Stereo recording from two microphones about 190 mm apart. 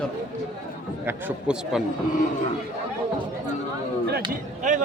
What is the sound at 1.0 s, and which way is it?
Speech, 10° right (ahead or behind).